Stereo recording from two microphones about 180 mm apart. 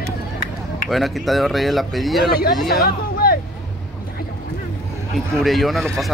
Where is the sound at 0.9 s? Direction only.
Centre (ahead or behind).